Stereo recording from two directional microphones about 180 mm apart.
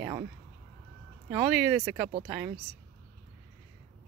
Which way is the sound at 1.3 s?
5° right (ahead or behind).